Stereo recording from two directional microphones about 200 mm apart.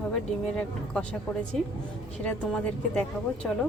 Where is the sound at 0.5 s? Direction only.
5° left (ahead or behind).